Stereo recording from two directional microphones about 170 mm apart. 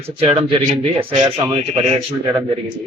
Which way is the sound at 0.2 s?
30° right (ahead or behind).